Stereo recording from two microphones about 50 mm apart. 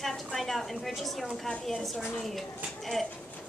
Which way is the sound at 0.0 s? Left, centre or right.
Centre.